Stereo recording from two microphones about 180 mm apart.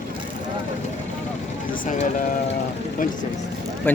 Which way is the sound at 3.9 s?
10° left (ahead or behind).